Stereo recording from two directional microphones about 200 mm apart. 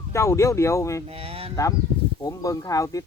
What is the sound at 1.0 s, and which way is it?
Speech, 30° right (ahead or behind).